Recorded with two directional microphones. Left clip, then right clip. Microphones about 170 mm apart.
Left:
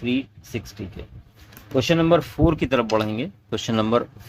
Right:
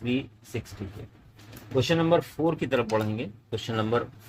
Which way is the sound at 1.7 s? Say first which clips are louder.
Left 5 dB; 65° left (ahead or behind).